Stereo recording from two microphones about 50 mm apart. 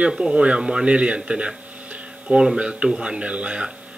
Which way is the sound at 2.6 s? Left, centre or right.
Right.